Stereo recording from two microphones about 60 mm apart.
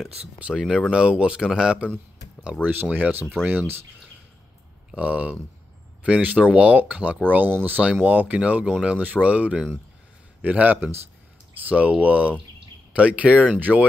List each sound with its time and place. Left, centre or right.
0.0 s speech: centre
2.6 s speech: right
4.9 s speech: right